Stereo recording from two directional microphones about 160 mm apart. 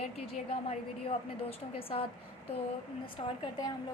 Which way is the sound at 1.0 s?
35° left (ahead or behind).